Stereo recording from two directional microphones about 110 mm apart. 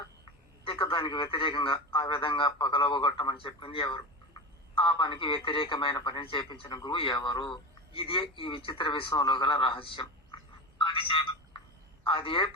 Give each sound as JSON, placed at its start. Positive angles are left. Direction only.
{"t": 0.6, "sound": "a man's voice", "side_deg": 50}
{"t": 10.8, "sound": "a sound", "side_deg": 55}
{"t": 12.0, "sound": "a man's voice", "side_deg": 50}